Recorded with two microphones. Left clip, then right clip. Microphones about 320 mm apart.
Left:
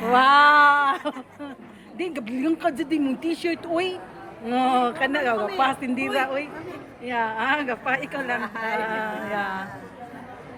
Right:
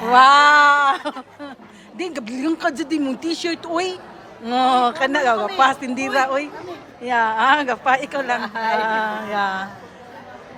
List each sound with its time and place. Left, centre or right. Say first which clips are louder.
0.1 s a sound: right 4 dB; centre
2.0 s speech: right 2 dB; centre
8.4 s a woman's voice: right 6 dB; right
8.8 s speech: right 6 dB; centre